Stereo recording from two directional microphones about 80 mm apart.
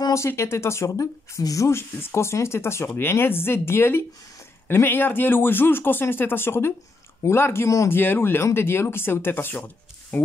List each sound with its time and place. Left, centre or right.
0.3 s speech: left